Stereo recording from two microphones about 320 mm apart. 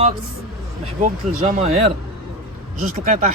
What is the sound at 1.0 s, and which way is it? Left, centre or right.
Speech, right.